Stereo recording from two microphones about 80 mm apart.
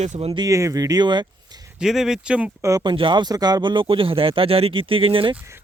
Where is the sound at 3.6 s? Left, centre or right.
Right.